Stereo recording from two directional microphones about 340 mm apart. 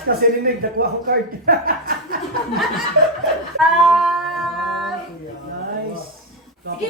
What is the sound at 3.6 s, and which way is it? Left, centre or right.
Female singing, centre.